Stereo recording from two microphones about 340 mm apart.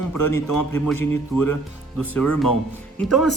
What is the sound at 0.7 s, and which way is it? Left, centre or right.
Speech, centre.